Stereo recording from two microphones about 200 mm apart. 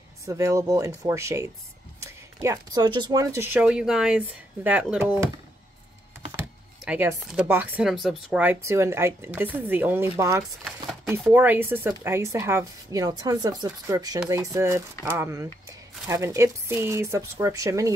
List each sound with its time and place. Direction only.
0.2 s speech: 15° right (ahead or behind)
6.3 s speech: 10° right (ahead or behind)